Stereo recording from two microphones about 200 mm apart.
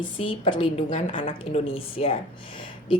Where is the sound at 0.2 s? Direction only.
25° left (ahead or behind).